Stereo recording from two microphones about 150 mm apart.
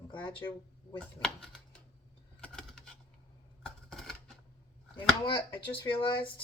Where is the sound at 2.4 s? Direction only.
5° left (ahead or behind).